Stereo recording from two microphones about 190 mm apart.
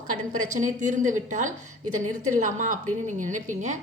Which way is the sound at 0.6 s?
40° right (ahead or behind).